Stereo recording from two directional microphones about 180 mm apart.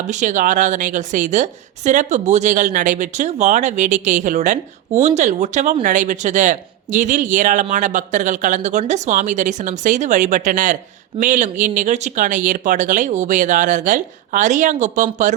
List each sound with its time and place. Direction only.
0.1 s a woman's voice: 45° right (ahead or behind)